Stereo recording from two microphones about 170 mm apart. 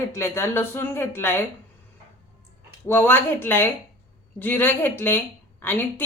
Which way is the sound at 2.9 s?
10° left (ahead or behind).